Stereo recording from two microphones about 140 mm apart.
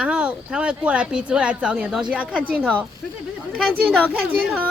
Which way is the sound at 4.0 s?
10° left (ahead or behind).